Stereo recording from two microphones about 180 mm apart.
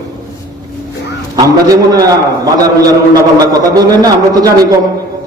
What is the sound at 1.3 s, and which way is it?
Speech, 20° right (ahead or behind).